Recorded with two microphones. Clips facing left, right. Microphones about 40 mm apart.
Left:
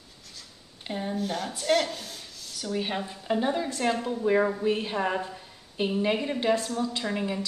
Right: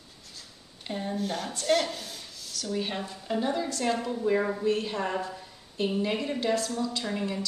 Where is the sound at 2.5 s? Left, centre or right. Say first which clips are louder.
Left 1 dB; centre.